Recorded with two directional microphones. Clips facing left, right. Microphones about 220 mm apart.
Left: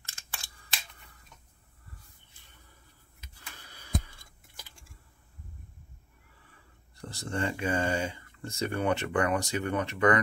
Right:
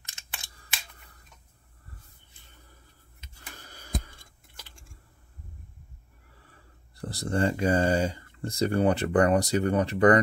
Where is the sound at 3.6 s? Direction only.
45° right (ahead or behind).